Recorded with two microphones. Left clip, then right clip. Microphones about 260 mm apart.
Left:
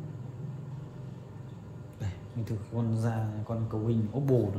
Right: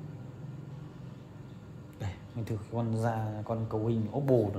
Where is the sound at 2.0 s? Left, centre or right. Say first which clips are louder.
Right 1 dB; right.